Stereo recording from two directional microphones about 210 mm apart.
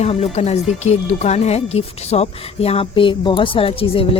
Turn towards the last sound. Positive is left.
turn(degrees=25)  # may be behind; listen again after turning